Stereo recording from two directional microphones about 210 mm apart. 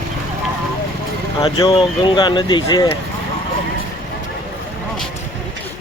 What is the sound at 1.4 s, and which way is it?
Speech, 20° left (ahead or behind).